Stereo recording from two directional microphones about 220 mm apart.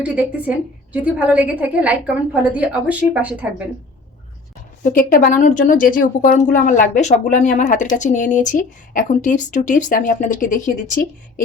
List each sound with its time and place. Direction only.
0.0 s a woman's voice: 5° right (ahead or behind)
4.8 s a woman's voice: 40° left (ahead or behind)